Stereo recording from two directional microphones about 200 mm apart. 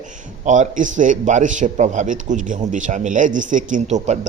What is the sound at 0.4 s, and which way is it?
Speech, 40° right (ahead or behind).